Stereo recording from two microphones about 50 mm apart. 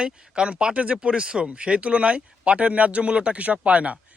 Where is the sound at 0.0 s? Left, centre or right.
Right.